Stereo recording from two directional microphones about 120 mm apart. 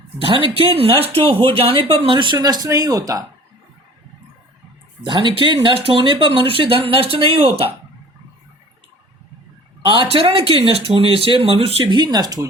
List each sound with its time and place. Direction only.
0.2 s speech: 45° right (ahead or behind); by 3.0 s 30° right (ahead or behind)
5.0 s speech: 40° right (ahead or behind)
9.8 s speech: 45° right (ahead or behind)
11.9 s speech: 35° right (ahead or behind)